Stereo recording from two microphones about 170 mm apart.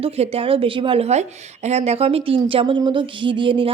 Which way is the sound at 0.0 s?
35° right (ahead or behind).